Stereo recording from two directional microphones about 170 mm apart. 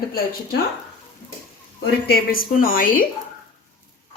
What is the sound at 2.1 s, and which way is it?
Speech, 60° left (ahead or behind).